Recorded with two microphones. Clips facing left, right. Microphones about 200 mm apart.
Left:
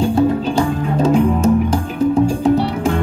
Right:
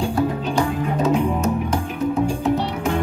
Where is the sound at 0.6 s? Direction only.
30° left (ahead or behind).